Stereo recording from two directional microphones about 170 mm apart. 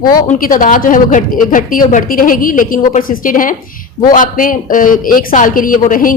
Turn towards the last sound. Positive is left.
turn(degrees=55)  # may be behind; listen again after turning